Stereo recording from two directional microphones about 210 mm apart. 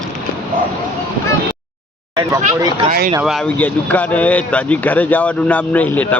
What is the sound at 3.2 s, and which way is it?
Speech, centre (ahead or behind).